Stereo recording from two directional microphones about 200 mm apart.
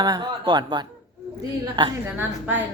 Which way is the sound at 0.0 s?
20° right (ahead or behind).